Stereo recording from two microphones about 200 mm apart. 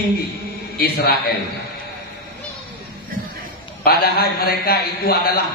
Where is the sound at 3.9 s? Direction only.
50° left (ahead or behind).